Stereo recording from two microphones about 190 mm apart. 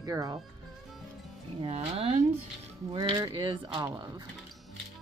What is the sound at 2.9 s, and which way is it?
Speech, 20° right (ahead or behind).